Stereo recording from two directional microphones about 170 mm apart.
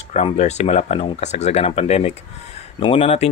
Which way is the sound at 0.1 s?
40° left (ahead or behind).